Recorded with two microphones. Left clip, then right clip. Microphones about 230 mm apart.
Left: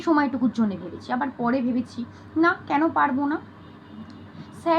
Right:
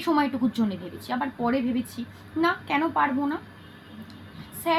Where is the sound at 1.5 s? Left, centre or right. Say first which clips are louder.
Left 2 dB; right.